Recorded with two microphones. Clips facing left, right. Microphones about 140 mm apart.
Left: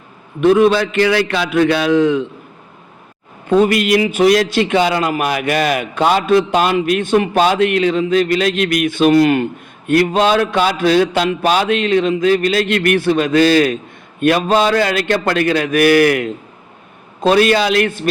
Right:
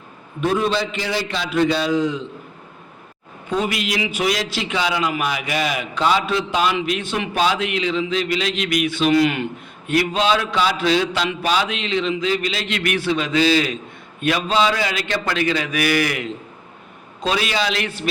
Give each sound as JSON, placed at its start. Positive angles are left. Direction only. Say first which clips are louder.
{"t": 0.4, "sound": "a man's voice", "louder": "left 9 dB", "side_deg": 65}
{"t": 3.5, "sound": "a man's voice", "louder": "left 10 dB", "side_deg": 50}